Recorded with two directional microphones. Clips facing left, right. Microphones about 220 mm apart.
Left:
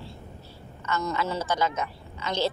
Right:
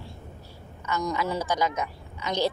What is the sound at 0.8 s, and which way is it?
A woman's voice, 15° right (ahead or behind).